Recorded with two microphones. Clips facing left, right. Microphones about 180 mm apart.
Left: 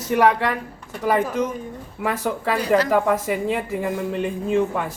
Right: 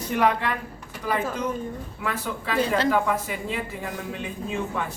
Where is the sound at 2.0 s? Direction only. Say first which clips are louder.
Left 7 dB; 50° left (ahead or behind).